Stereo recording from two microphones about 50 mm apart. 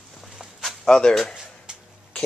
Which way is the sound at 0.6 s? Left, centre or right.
Centre.